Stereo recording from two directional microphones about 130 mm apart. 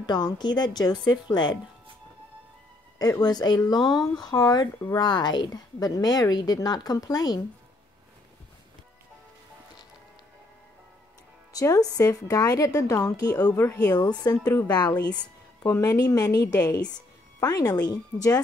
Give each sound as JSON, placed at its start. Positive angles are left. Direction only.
{"t": 0.0, "sound": "speech", "side_deg": 35}
{"t": 3.0, "sound": "speech", "side_deg": 30}
{"t": 11.5, "sound": "a woman's voice", "side_deg": 30}